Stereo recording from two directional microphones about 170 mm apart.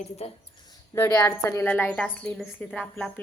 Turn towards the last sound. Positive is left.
turn(degrees=5)  # may be behind; listen again after turning